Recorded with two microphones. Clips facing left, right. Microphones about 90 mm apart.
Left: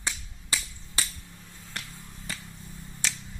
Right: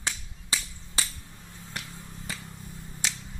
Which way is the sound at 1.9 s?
15° right (ahead or behind).